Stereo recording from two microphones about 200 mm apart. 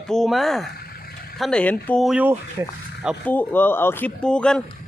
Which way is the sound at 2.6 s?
15° right (ahead or behind).